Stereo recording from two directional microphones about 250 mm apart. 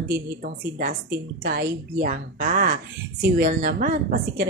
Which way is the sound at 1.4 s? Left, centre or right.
Right.